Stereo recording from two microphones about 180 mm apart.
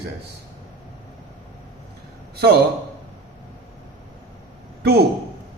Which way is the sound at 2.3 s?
65° right (ahead or behind).